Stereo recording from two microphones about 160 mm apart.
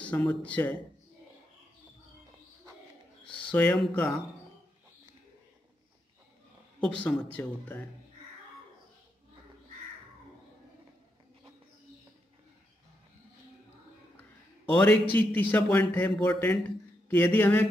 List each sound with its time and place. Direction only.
0.0 s a man's voice: 5° left (ahead or behind)
3.3 s a sound: 30° left (ahead or behind)
3.5 s a man's voice: 5° left (ahead or behind)
6.8 s a man's voice: 5° left (ahead or behind)
14.8 s a man's voice: 10° left (ahead or behind)